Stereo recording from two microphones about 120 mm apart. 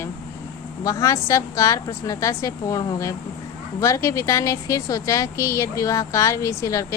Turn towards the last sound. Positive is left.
turn(degrees=25)  # may be behind; listen again after turning